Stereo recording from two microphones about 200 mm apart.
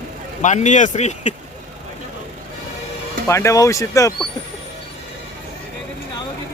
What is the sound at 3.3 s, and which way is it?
Speech, 15° left (ahead or behind).